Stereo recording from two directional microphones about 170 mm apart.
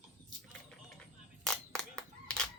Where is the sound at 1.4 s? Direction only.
5° left (ahead or behind).